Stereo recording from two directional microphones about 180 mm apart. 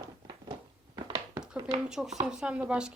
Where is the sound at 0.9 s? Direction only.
25° right (ahead or behind).